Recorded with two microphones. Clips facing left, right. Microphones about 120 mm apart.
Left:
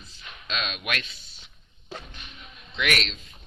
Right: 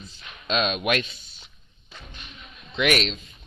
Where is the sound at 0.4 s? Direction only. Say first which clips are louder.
Right 8 dB; 25° right (ahead or behind).